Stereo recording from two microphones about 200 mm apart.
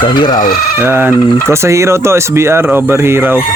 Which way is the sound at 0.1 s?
20° left (ahead or behind).